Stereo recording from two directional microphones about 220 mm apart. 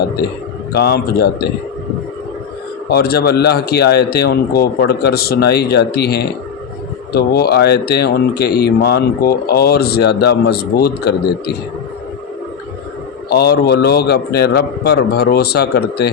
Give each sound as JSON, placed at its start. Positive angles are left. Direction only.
{"t": 0.7, "sound": "speech", "side_deg": 45}
{"t": 2.9, "sound": "speech", "side_deg": 45}
{"t": 13.3, "sound": "speech", "side_deg": 45}